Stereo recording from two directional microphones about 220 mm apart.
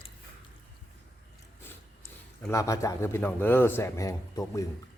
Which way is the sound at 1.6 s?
10° left (ahead or behind).